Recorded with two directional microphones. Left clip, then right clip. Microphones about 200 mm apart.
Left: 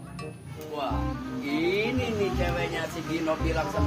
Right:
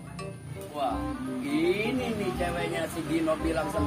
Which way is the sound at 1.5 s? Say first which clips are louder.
Left 1 dB; 15° left (ahead or behind).